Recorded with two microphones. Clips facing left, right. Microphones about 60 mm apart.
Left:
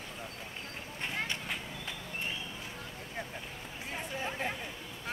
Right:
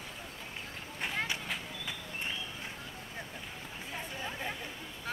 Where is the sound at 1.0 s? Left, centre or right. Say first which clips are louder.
Right 1 dB; centre.